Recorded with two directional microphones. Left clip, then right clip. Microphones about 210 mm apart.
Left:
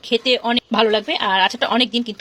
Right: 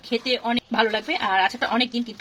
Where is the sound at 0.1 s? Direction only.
45° left (ahead or behind).